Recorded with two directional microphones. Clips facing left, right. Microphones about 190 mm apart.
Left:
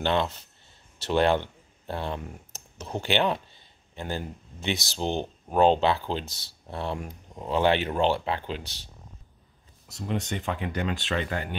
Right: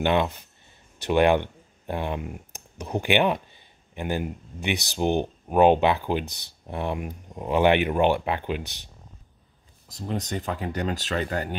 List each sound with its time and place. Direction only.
0.0 s speech: 15° right (ahead or behind)
9.8 s speech: 35° right (ahead or behind)